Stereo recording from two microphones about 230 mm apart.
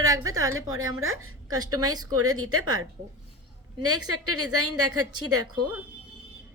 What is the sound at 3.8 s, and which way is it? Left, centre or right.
A woman's voice, right.